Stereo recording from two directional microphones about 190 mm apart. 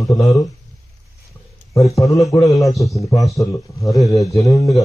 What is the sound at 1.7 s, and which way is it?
Speech, 15° left (ahead or behind).